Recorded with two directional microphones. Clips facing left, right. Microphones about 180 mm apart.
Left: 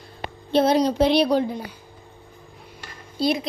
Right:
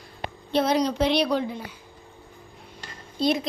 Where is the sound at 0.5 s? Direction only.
30° left (ahead or behind).